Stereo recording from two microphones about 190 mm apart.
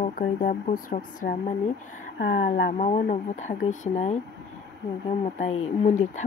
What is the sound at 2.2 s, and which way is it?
Speech, 65° left (ahead or behind).